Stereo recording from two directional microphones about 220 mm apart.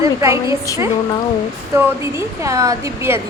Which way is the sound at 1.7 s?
10° right (ahead or behind).